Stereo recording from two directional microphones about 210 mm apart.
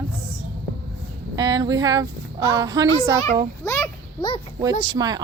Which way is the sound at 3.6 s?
15° left (ahead or behind).